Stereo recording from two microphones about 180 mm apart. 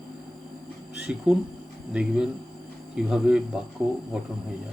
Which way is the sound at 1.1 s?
5° right (ahead or behind).